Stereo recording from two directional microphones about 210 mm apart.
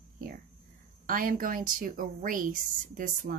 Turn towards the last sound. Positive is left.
turn(degrees=-40)  # may be behind; listen again after turning